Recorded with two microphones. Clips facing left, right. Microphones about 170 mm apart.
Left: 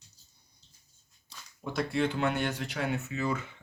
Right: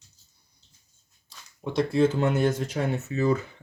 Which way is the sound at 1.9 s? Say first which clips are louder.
Right 6 dB; 40° right (ahead or behind).